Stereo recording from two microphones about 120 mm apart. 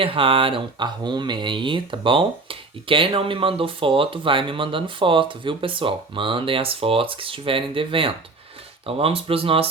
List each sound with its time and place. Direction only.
0.0 s speech: 50° right (ahead or behind)